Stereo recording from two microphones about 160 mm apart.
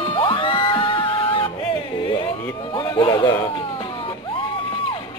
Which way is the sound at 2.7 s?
30° left (ahead or behind).